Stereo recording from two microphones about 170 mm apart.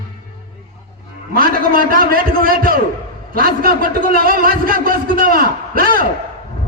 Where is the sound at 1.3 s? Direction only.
60° right (ahead or behind).